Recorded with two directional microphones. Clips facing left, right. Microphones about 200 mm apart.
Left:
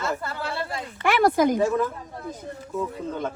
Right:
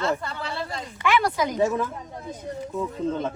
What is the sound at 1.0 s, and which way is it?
Speech, 50° left (ahead or behind).